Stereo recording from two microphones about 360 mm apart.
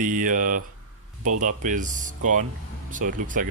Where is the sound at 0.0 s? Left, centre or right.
Right.